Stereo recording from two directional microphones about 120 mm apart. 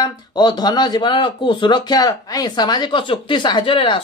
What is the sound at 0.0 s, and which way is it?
A man's voice, 35° left (ahead or behind).